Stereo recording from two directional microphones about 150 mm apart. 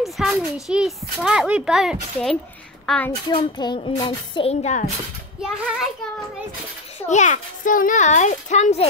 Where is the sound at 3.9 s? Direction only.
30° left (ahead or behind).